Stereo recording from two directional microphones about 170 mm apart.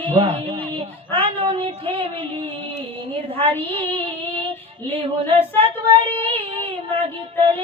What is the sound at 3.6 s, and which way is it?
Child singing, 30° right (ahead or behind).